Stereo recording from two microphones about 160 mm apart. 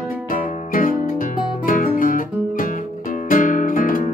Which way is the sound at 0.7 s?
60° left (ahead or behind).